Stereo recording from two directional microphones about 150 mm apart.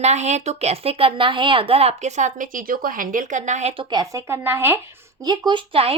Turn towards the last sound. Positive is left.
turn(degrees=-35)  # may be behind; listen again after turning